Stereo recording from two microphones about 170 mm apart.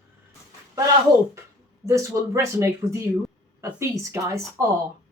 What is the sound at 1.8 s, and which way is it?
Speech, 15° right (ahead or behind).